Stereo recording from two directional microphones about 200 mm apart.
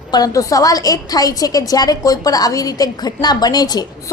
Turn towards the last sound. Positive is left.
turn(degrees=20)  # may be behind; listen again after turning